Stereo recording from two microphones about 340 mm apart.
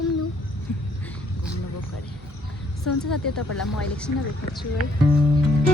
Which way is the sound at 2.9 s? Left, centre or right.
Left.